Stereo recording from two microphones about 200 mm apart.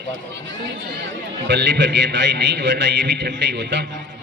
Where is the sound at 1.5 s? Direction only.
60° right (ahead or behind).